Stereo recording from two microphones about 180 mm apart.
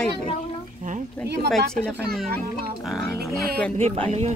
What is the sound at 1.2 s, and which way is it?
Speech, 65° right (ahead or behind).